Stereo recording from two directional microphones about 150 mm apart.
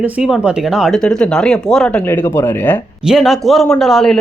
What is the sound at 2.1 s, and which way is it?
Speech, 15° left (ahead or behind).